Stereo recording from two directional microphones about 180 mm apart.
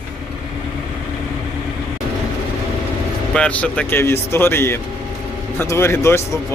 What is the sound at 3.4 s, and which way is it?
Speech, 5° left (ahead or behind).